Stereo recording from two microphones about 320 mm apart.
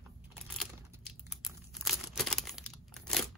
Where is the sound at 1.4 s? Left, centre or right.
Centre.